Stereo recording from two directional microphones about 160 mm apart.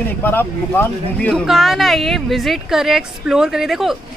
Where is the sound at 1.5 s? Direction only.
Centre (ahead or behind).